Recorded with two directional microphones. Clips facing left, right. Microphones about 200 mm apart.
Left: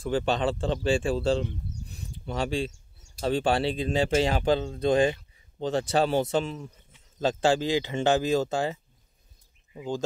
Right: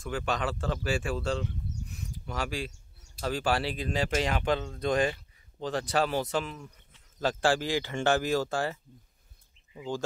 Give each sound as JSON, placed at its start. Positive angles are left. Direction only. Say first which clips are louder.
{"t": 0.0, "sound": "speech", "louder": "left 6 dB", "side_deg": 30}
{"t": 9.8, "sound": "speech", "louder": "left 3 dB", "side_deg": 20}